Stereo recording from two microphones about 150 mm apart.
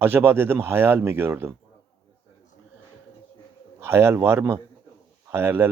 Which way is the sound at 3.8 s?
15° right (ahead or behind).